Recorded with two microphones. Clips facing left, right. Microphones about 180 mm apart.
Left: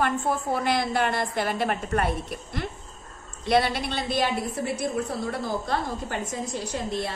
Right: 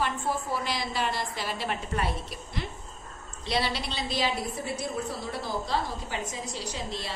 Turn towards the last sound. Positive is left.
turn(degrees=55)  # may be behind; listen again after turning